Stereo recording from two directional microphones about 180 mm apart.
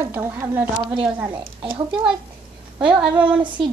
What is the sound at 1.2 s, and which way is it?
Speech, 25° right (ahead or behind).